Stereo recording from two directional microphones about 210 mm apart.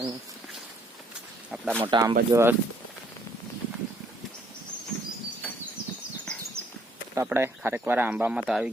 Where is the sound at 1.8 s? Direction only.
20° right (ahead or behind).